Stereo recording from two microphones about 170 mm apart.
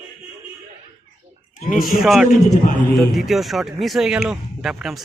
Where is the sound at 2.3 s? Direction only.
50° left (ahead or behind).